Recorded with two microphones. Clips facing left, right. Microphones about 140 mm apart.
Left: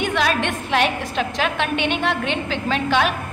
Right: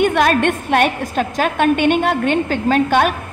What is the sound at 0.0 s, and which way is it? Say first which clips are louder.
A woman's voice: right 7 dB; 50° right (ahead or behind).